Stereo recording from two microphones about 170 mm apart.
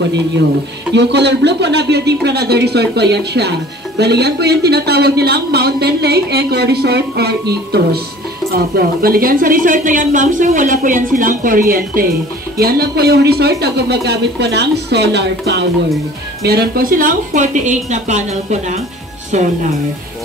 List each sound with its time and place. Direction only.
0.9 s a woman's voice: 90° right
16.4 s a woman's voice: 65° right (ahead or behind); by 19.5 s 45° right (ahead or behind)